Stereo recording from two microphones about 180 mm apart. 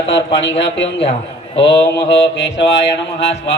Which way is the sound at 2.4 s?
80° left.